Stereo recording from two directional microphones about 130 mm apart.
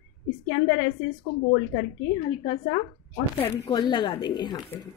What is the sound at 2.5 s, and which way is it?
A woman's voice, 40° left (ahead or behind).